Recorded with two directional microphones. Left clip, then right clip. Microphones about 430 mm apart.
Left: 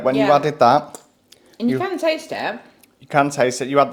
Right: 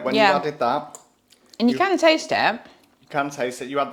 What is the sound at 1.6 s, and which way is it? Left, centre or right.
Speech, right.